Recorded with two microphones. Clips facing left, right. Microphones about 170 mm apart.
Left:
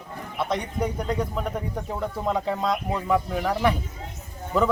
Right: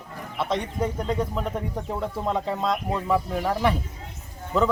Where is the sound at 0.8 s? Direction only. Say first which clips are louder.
Even; centre (ahead or behind).